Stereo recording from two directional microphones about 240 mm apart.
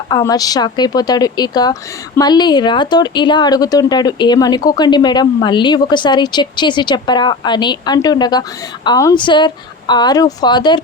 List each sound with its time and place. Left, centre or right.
0.1 s speech: centre